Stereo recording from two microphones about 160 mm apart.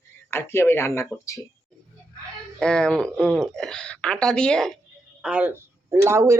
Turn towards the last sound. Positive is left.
turn(degrees=-15)  # may be behind; listen again after turning